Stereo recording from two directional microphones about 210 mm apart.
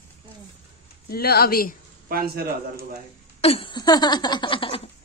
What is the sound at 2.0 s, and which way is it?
Speech, 45° right (ahead or behind).